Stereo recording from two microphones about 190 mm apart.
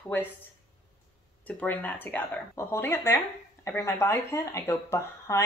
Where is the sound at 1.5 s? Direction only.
10° left (ahead or behind).